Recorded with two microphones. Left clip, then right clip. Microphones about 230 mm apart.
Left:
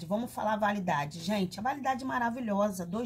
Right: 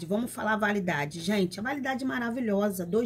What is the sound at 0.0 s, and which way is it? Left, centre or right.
Speech, centre.